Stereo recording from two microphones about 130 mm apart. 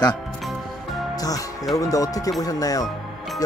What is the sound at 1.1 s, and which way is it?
Music, 25° left (ahead or behind).